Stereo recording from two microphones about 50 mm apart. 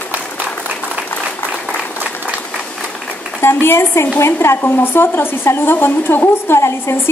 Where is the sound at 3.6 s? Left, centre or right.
Left.